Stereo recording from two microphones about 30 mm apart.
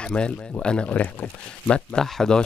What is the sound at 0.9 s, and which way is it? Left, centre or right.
Speech, left.